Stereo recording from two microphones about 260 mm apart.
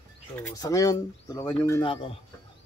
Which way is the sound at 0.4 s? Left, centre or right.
Centre.